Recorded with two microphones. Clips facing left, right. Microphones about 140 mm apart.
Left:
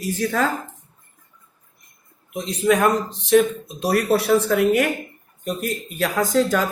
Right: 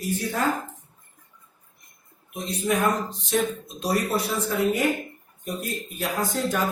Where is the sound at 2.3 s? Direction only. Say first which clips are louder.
Left 6 dB; 90° left.